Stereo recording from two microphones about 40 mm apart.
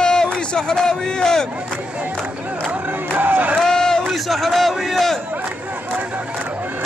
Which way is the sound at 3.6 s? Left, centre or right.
Centre.